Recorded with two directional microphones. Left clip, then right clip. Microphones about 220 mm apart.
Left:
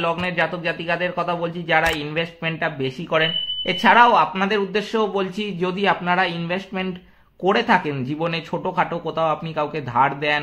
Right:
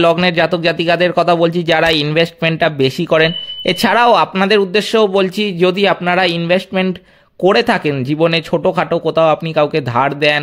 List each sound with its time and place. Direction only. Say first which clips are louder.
0.0 s speech: right 10 dB; 50° right (ahead or behind)